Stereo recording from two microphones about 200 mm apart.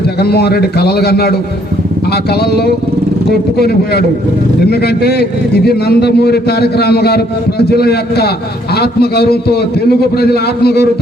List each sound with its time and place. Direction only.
0.2 s a man's voice: 55° left (ahead or behind)